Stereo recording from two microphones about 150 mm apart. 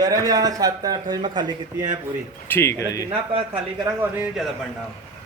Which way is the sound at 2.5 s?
20° left (ahead or behind).